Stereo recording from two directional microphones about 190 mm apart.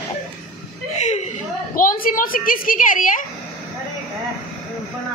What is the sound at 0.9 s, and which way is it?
Chuckle, 35° left (ahead or behind).